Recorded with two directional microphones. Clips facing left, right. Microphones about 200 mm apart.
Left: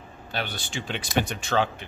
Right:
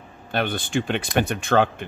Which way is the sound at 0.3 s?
55° right (ahead or behind).